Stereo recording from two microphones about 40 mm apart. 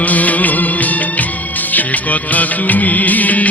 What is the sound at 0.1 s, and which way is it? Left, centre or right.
Music, left.